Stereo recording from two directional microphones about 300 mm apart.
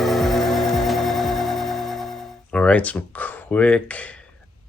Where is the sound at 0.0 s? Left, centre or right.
Centre.